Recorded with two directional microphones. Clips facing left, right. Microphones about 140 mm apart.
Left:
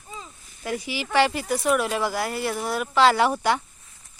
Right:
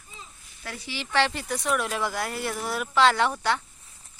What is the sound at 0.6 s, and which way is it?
Speech, 15° left (ahead or behind).